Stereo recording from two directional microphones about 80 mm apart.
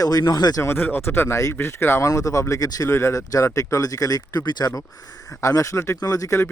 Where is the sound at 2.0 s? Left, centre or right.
Left.